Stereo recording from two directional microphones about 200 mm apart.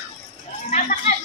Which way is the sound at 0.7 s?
35° left (ahead or behind).